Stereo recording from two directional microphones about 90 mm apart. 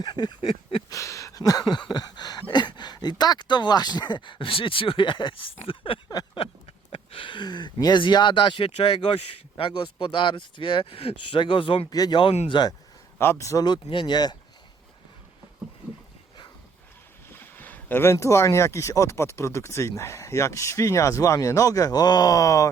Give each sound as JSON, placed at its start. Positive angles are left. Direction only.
{"t": 0.0, "sound": "speech", "side_deg": 50}
{"t": 0.9, "sound": "a sound", "side_deg": 35}
{"t": 8.0, "sound": "speech", "side_deg": 60}
{"t": 9.6, "sound": "speech", "side_deg": 70}
{"t": 11.9, "sound": "speech", "side_deg": 45}
{"t": 13.4, "sound": "speech", "side_deg": 35}
{"t": 13.7, "sound": "speech", "side_deg": 55}
{"t": 17.3, "sound": "speech", "side_deg": 25}